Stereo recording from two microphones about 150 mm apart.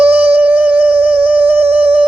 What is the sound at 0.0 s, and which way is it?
Music, 10° right (ahead or behind).